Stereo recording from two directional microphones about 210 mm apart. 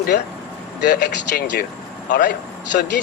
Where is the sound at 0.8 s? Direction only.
45° left (ahead or behind).